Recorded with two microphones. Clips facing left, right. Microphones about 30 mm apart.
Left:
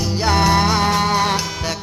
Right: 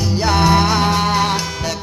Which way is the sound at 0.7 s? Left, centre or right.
Centre.